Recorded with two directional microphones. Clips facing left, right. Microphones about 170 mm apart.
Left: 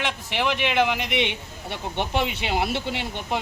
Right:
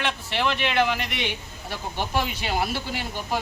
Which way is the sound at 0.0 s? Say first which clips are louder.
Even; 15° left (ahead or behind).